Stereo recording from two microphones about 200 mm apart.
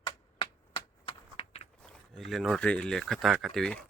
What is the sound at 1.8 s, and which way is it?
Speech, centre (ahead or behind).